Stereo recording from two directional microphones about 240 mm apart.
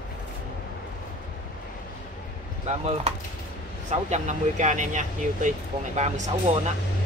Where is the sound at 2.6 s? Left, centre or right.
Right.